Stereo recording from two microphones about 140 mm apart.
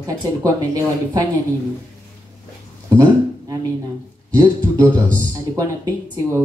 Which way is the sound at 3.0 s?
30° right (ahead or behind).